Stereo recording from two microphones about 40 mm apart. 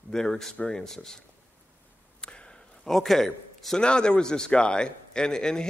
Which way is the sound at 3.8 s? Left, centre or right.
Left.